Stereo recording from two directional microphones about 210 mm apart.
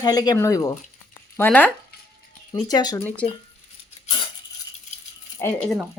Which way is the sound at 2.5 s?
20° left (ahead or behind).